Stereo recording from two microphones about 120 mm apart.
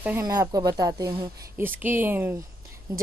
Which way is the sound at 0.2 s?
30° right (ahead or behind).